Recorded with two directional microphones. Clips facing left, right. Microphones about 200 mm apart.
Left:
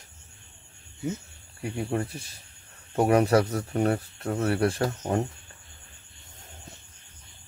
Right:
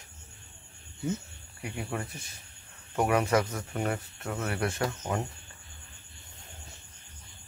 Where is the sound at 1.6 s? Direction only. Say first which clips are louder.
Left 6 dB; 30° left (ahead or behind).